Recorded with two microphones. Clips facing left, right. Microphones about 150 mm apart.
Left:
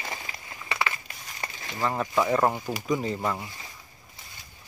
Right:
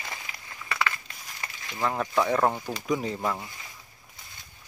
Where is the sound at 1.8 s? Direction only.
Centre (ahead or behind).